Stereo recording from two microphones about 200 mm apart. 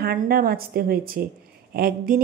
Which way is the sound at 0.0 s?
50° right (ahead or behind).